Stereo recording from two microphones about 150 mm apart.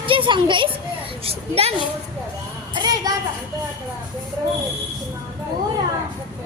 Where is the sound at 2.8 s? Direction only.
25° right (ahead or behind).